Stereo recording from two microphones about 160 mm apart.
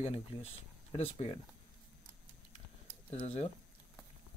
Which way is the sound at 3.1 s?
40° left (ahead or behind).